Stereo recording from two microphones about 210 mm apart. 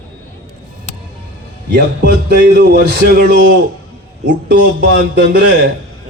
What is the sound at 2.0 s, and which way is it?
Speech, 50° right (ahead or behind).